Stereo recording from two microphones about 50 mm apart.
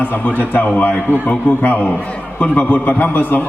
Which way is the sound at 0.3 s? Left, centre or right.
Left.